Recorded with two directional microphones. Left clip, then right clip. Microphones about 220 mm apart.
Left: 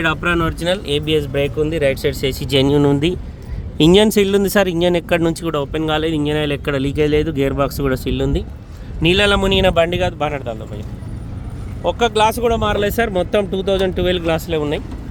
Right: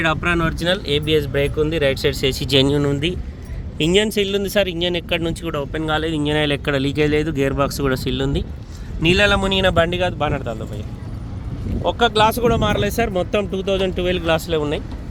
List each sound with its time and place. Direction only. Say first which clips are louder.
0.0 s speech: left 1 dB; centre (ahead or behind)
2.8 s speech: left 5 dB; 25° left (ahead or behind)
3.8 s speech: left 5 dB; 40° left (ahead or behind)
5.7 s speech: left 1 dB; 15° left (ahead or behind)
6.3 s speech: even; centre (ahead or behind)
9.0 s speech: left 1 dB; 10° left (ahead or behind)
11.8 s speech: left 1 dB; centre (ahead or behind)
14.3 s speech: even; 5° left (ahead or behind)